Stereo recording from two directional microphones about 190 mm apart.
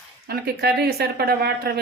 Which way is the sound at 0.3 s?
55° right (ahead or behind).